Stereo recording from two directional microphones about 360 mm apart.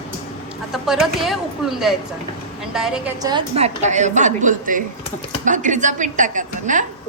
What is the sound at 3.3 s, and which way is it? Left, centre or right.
A woman's voice, centre.